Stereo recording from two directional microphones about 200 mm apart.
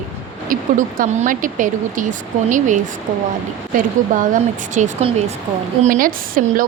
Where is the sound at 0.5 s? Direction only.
40° right (ahead or behind).